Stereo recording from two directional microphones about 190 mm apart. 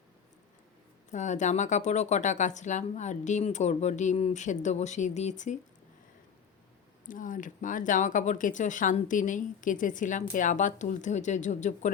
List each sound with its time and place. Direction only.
1.1 s speech: 40° left (ahead or behind)
7.1 s speech: 45° left (ahead or behind)